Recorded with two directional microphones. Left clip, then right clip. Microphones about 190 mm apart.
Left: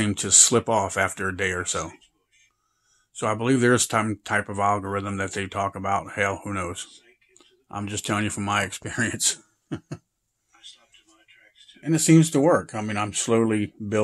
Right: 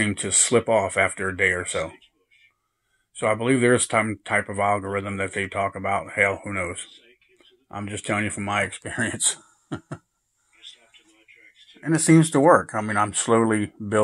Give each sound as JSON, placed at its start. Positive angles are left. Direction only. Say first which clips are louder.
{"t": 0.0, "sound": "speech", "louder": "left 3 dB", "side_deg": 25}
{"t": 3.2, "sound": "speech", "louder": "right 2 dB", "side_deg": 25}
{"t": 11.8, "sound": "speech", "louder": "right 1 dB", "side_deg": 5}
{"t": 12.4, "sound": "speech", "louder": "right 4 dB", "side_deg": 20}
{"t": 12.6, "sound": "speech", "louder": "right 5 dB", "side_deg": 5}